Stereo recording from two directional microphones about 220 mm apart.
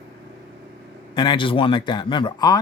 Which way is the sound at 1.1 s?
20° left (ahead or behind).